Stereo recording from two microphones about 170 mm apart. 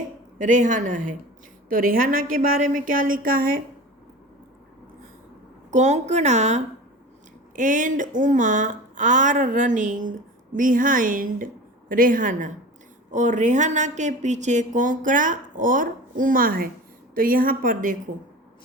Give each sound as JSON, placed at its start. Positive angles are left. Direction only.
{"t": 0.3, "sound": "a woman's voice", "side_deg": -50}
{"t": 5.7, "sound": "a woman's voice", "side_deg": -45}